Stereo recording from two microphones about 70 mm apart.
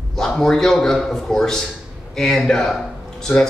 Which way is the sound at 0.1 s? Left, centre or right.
Centre.